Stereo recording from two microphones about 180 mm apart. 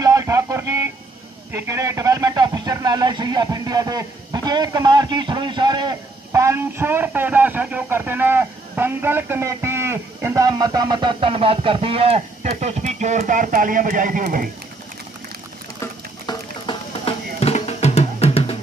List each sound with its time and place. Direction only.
0.0 s a sound: 20° right (ahead or behind)
1.5 s speech: 15° right (ahead or behind); by 14.5 s 55° right (ahead or behind)
16.3 s music: 30° left (ahead or behind)